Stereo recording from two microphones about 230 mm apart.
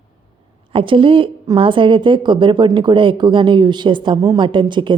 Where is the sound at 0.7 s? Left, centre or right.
Right.